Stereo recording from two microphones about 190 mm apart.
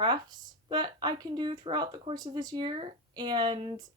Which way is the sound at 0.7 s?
20° right (ahead or behind).